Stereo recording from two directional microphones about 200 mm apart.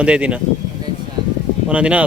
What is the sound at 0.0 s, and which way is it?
Speech, 5° right (ahead or behind).